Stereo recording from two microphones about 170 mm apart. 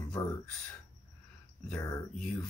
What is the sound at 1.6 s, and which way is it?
Speech, 15° left (ahead or behind).